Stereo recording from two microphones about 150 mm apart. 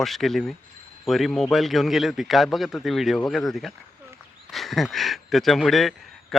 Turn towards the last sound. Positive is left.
turn(degrees=0)  # may be behind; listen again after turning